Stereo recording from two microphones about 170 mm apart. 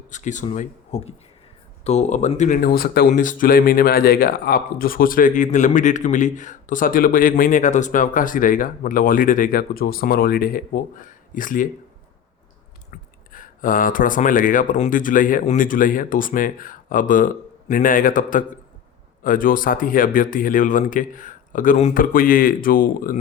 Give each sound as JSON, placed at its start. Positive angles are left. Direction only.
{"t": 0.1, "sound": "speech", "side_deg": 45}
{"t": 3.1, "sound": "speech", "side_deg": 50}
{"t": 12.9, "sound": "speech", "side_deg": 55}
{"t": 22.1, "sound": "speech", "side_deg": 55}